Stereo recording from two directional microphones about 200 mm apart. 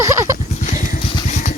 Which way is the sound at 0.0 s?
15° right (ahead or behind).